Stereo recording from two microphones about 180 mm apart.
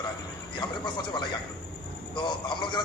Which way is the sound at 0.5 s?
25° left (ahead or behind).